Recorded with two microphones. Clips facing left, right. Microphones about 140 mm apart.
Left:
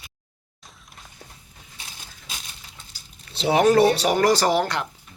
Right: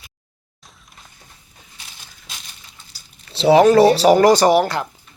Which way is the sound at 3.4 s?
90° right.